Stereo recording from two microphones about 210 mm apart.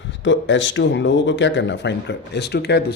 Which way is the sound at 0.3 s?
60° left (ahead or behind).